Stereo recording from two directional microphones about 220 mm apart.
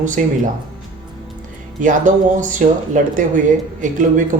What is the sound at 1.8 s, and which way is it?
Speech, 35° right (ahead or behind).